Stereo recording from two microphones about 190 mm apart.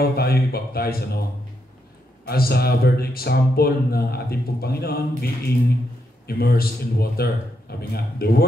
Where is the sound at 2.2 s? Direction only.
55° left (ahead or behind).